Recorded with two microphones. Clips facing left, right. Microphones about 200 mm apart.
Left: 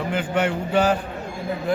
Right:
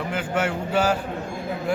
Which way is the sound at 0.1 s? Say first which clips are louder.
Left 3 dB; 5° right (ahead or behind).